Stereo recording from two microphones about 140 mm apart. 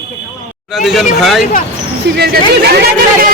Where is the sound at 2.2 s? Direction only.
90° right.